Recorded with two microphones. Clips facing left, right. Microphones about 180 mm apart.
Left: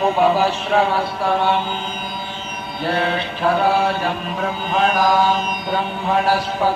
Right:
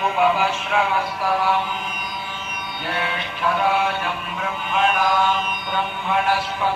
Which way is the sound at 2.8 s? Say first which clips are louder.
Left 7 dB; 35° left (ahead or behind).